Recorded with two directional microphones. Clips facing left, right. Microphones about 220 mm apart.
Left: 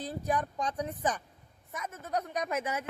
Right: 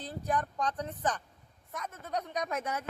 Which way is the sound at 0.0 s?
10° left (ahead or behind).